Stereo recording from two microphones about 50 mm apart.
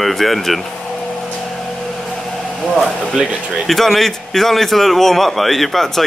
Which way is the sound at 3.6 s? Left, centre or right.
Centre.